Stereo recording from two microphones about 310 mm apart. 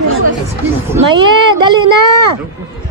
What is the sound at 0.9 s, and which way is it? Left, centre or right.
Speech, centre.